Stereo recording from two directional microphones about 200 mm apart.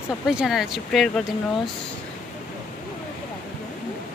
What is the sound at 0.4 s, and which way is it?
Speech, centre (ahead or behind).